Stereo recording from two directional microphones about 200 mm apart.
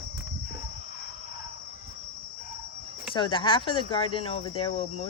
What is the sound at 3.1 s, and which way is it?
Speech, 25° left (ahead or behind).